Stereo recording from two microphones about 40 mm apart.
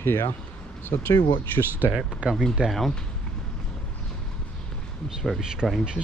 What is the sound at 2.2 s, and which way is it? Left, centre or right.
Speech, right.